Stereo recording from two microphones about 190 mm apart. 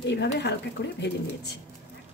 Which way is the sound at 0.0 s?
65° left (ahead or behind).